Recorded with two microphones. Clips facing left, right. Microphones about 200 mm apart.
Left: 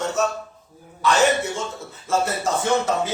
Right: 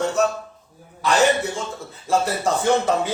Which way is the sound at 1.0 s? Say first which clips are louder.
Right 1 dB; 35° right (ahead or behind).